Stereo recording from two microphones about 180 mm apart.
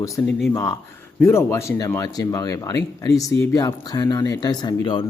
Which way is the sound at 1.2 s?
15° left (ahead or behind).